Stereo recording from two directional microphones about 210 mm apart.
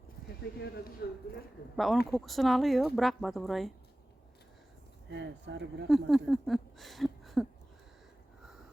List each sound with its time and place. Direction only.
0.6 s speech: 50° left (ahead or behind)
1.7 s speech: centre (ahead or behind)
5.1 s speech: 55° right (ahead or behind)
5.9 s speech: centre (ahead or behind)